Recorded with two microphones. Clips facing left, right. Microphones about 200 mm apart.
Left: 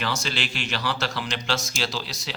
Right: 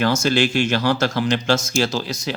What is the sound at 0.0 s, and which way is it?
Speech, 45° right (ahead or behind).